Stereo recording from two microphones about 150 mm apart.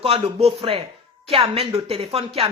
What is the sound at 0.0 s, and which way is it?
A woman's voice, 40° right (ahead or behind).